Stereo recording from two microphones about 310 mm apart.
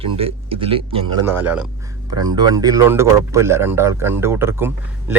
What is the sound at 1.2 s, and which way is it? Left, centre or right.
Speech, centre.